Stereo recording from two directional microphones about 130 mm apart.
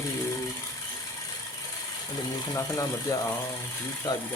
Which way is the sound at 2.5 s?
25° left (ahead or behind).